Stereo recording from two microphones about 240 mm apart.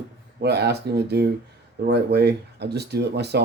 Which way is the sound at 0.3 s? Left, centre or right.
Right.